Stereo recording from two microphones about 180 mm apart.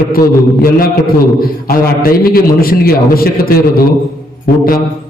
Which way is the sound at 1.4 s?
55° left (ahead or behind).